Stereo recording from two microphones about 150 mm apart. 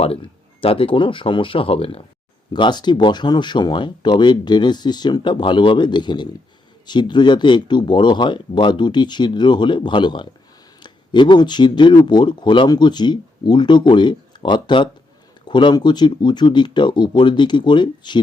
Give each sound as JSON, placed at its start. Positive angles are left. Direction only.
{"t": 0.0, "sound": "speech", "side_deg": 40}